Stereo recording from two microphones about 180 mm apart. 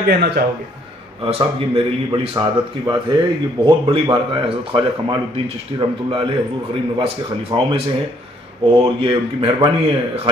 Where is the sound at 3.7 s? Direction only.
25° right (ahead or behind).